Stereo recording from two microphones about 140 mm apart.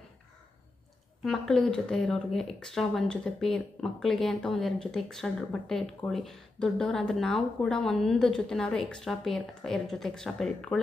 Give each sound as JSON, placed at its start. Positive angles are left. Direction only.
{"t": 1.2, "sound": "speech", "side_deg": 0}